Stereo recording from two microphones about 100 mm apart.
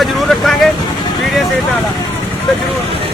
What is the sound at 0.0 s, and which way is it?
Vehicle, 5° left (ahead or behind).